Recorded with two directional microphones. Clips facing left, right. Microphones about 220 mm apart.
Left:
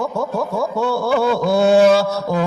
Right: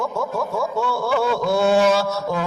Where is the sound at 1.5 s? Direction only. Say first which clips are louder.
Left 5 dB; 35° left (ahead or behind).